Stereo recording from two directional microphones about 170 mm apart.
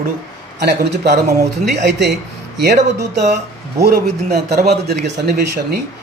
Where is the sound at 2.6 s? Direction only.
80° right.